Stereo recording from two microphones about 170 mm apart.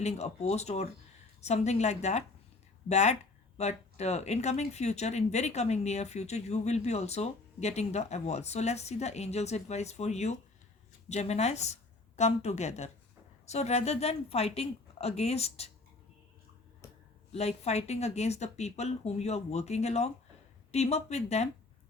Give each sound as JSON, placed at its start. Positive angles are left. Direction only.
{"t": 0.0, "sound": "speech", "side_deg": 40}
{"t": 17.3, "sound": "speech", "side_deg": 40}